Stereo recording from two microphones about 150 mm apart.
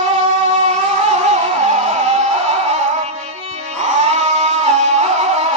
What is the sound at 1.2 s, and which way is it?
Music, 50° right (ahead or behind).